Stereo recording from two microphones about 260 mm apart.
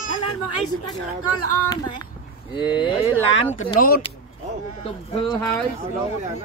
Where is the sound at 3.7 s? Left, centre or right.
Left.